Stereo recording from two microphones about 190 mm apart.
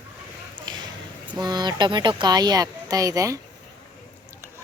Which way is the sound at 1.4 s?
20° right (ahead or behind).